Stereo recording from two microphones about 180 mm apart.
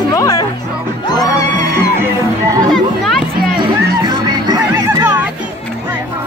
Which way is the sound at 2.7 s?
Centre (ahead or behind).